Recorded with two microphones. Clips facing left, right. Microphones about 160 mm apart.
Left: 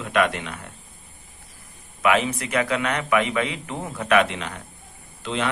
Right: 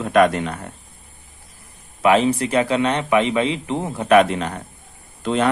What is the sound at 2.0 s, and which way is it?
A man's voice, 30° right (ahead or behind).